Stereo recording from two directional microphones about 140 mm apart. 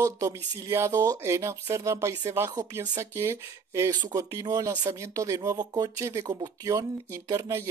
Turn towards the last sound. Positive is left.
turn(degrees=-20)  # may be behind; listen again after turning